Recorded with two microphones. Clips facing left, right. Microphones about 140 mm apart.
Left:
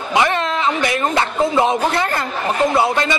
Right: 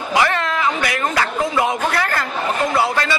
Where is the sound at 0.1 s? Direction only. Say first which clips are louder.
Left 1 dB; 20° left (ahead or behind).